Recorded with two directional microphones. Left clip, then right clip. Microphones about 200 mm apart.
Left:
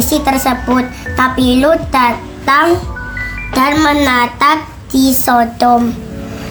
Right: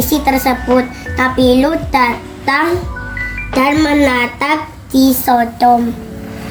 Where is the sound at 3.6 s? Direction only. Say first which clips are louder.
Left 1 dB; 45° left (ahead or behind).